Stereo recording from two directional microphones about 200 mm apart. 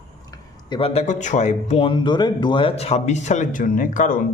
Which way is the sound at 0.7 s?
30° left (ahead or behind).